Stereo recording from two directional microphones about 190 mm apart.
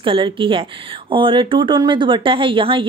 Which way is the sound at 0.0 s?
25° right (ahead or behind).